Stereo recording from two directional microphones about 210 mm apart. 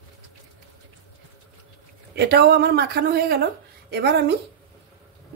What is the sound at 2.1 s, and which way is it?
Speech, 50° right (ahead or behind).